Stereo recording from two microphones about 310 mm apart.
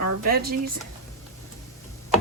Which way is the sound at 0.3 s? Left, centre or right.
Right.